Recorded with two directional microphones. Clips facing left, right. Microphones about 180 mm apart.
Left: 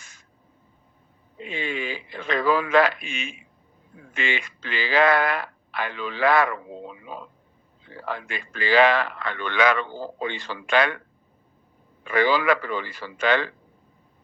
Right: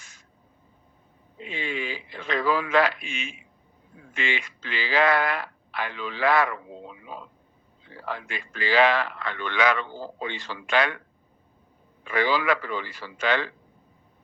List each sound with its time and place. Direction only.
1.4 s speech: 55° left (ahead or behind)
12.0 s speech: 55° left (ahead or behind)